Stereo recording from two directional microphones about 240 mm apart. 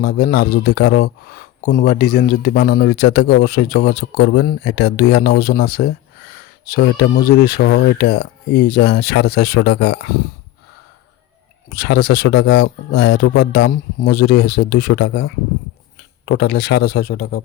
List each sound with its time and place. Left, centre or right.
0.0 s speech: left
11.7 s speech: left